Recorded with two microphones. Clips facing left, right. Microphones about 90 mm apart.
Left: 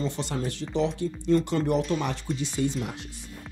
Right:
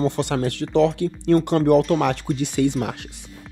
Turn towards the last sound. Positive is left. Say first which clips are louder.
# right 7 dB
turn(degrees=-70)  # may be behind; listen again after turning